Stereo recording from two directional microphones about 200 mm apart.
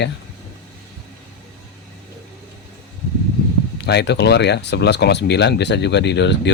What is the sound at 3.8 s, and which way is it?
Speech, 60° left (ahead or behind).